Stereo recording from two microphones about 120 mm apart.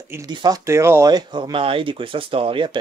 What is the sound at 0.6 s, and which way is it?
Speech, 25° right (ahead or behind).